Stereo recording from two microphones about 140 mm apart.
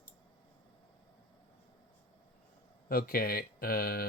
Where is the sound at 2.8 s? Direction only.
90° left.